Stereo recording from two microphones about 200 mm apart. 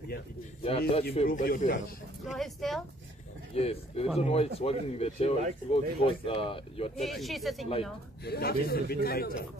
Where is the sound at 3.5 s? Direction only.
30° left (ahead or behind).